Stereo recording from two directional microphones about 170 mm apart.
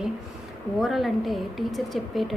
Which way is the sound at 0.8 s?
Centre (ahead or behind).